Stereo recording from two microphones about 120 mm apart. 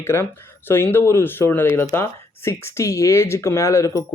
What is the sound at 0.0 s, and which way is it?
Speech, 20° left (ahead or behind).